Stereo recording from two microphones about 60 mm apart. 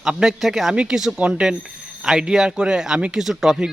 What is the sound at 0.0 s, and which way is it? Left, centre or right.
Speech, centre.